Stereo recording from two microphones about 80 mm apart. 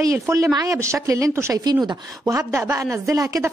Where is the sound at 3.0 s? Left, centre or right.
Right.